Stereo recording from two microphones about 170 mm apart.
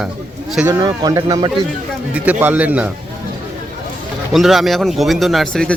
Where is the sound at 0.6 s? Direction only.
25° right (ahead or behind).